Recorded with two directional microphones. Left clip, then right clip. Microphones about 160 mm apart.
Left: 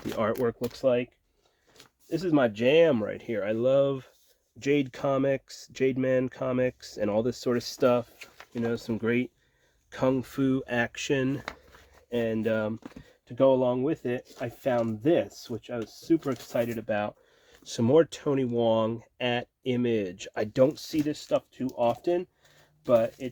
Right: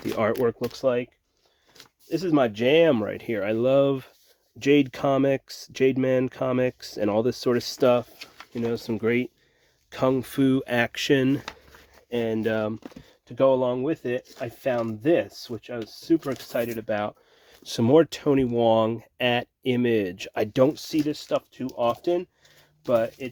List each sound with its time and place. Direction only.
0.2 s speech: 50° right (ahead or behind)
0.7 s speech: 35° right (ahead or behind)
2.0 s speech: 40° right (ahead or behind)
13.2 s speech: 35° right (ahead or behind)